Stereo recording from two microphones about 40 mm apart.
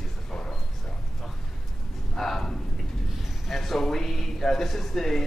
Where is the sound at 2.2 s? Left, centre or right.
Centre.